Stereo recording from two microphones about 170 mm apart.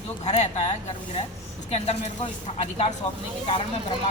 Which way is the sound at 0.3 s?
40° left (ahead or behind).